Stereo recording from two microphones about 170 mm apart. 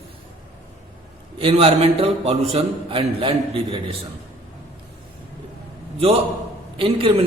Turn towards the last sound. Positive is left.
turn(degrees=-30)  # may be behind; listen again after turning